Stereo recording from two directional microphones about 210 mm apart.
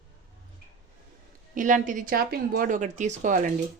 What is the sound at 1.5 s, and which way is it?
Speech, 40° right (ahead or behind).